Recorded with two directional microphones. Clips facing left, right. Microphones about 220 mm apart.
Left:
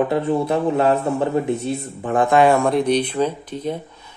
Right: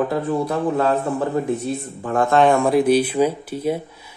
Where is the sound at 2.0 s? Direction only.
15° left (ahead or behind).